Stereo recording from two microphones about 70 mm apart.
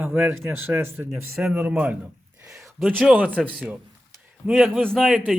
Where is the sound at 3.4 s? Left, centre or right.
Centre.